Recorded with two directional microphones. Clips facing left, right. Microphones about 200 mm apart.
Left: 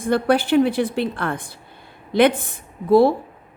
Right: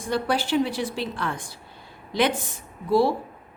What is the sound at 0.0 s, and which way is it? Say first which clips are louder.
A woman's voice: left 7 dB; 55° left (ahead or behind).